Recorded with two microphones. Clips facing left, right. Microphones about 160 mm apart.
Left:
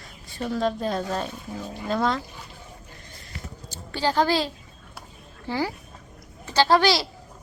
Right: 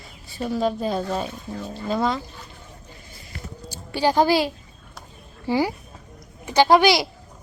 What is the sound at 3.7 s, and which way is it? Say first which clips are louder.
A woman's voice: right 4 dB; 15° right (ahead or behind).